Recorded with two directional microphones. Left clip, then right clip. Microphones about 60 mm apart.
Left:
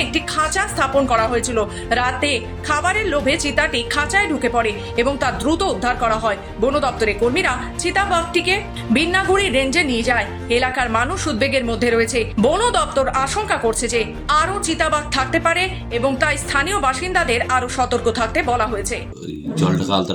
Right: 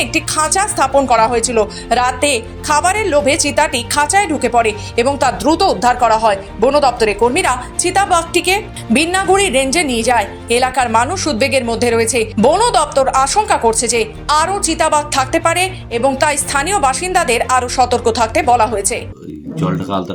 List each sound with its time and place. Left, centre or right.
0.0 s a woman's voice: right
5.0 s a woman's voice: right
11.1 s speech: right
11.3 s a woman's voice: right
12.4 s a woman's voice: right
19.5 s speech: centre